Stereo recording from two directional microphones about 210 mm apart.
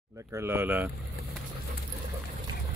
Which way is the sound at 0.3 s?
10° right (ahead or behind).